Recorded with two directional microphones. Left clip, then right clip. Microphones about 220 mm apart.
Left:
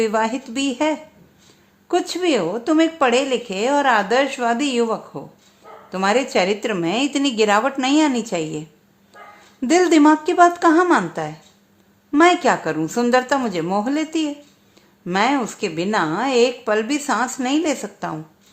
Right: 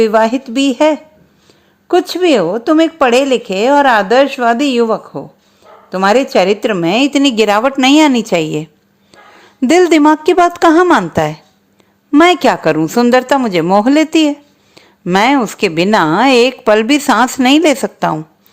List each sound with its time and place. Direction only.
0.0 s a woman's voice: 25° right (ahead or behind)